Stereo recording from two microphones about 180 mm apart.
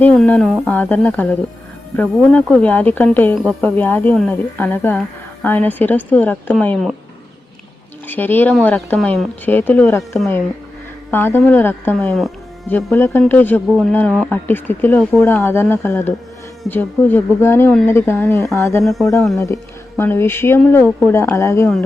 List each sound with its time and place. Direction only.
0.0 s speech: 5° left (ahead or behind)
8.0 s speech: 10° left (ahead or behind)
20.0 s speech: 15° left (ahead or behind)